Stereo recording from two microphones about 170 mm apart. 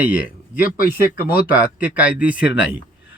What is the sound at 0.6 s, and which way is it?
Speech, 55° left (ahead or behind).